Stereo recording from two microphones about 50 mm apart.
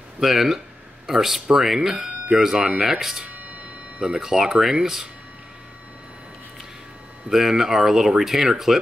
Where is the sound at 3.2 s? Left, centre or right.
Right.